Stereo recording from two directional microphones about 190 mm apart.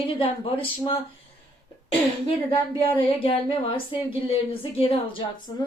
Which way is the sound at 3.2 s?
30° left (ahead or behind).